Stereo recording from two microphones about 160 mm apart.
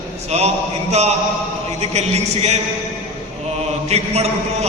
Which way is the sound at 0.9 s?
45° right (ahead or behind).